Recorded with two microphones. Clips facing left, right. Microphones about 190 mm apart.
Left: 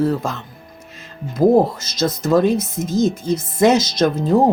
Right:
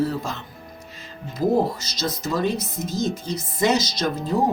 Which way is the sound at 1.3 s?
50° left (ahead or behind).